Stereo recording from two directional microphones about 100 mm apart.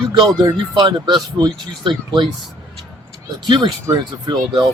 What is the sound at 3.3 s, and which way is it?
Speech, 50° right (ahead or behind).